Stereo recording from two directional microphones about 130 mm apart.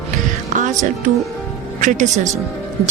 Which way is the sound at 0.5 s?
75° right (ahead or behind).